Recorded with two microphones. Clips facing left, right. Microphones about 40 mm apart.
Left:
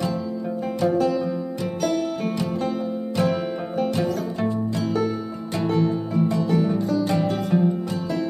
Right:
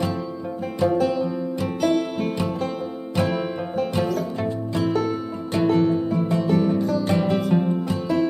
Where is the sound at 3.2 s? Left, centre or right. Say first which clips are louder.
Even; centre.